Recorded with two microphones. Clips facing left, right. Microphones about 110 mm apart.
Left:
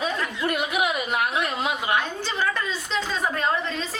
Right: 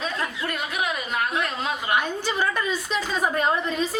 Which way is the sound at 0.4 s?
15° left (ahead or behind).